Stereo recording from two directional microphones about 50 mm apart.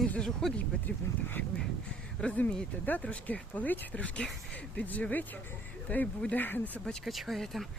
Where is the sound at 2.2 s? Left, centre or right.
Left.